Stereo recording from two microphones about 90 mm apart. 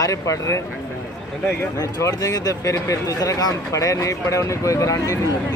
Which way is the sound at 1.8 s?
40° left (ahead or behind).